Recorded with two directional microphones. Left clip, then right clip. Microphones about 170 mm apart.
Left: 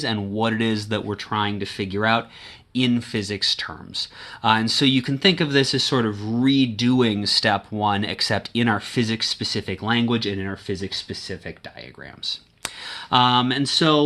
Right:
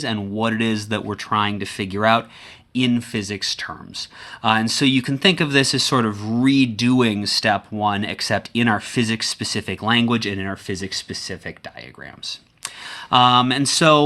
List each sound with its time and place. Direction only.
0.0 s speech: 10° right (ahead or behind); by 14.0 s 45° right (ahead or behind)